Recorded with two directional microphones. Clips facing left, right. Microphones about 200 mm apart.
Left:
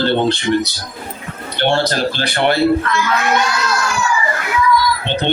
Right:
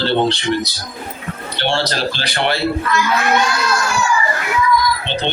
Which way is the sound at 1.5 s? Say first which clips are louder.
Left 4 dB; 50° left (ahead or behind).